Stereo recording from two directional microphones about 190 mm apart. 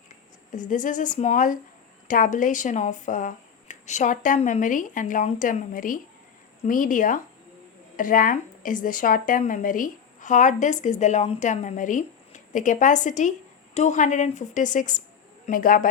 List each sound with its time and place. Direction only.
0.5 s a woman's voice: 40° left (ahead or behind)